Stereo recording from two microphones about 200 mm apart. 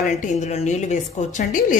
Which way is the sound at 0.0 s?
40° left (ahead or behind).